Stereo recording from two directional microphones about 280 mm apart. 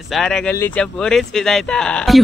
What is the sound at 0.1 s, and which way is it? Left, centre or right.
Speech, centre.